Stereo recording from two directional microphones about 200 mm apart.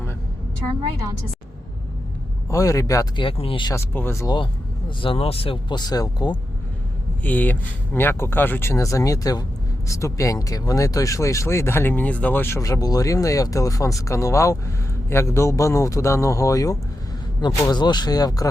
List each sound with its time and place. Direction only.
2.5 s speech: 15° left (ahead or behind)
5.0 s speech: 30° left (ahead or behind)
7.2 s speech: 10° left (ahead or behind)